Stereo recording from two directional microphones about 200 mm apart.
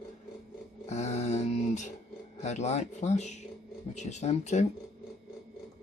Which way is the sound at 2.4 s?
35° left (ahead or behind).